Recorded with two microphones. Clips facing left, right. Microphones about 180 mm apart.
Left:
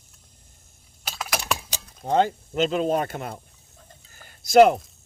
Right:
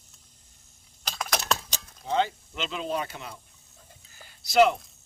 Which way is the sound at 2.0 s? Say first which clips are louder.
Left 5 dB; 50° left (ahead or behind).